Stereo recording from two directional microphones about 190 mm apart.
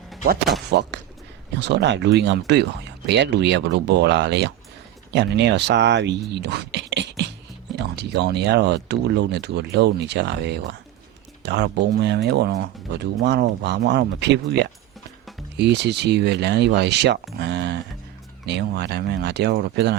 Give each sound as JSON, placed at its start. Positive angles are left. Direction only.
{"t": 0.7, "sound": "speech", "side_deg": -65}
{"t": 17.3, "sound": "a sound", "side_deg": -65}
{"t": 18.4, "sound": "speech", "side_deg": -60}